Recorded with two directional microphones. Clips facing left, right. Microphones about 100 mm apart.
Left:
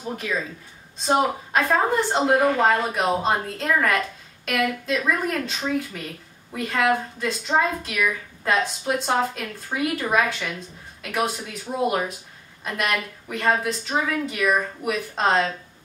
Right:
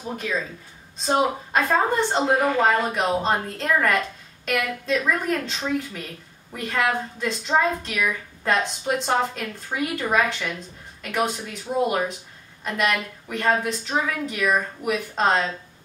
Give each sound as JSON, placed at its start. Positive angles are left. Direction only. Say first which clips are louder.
{"t": 1.0, "sound": "a woman's voice", "louder": "left 1 dB", "side_deg": 0}